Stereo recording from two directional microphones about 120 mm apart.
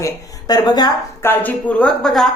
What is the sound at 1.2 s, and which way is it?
A woman's voice, 15° left (ahead or behind).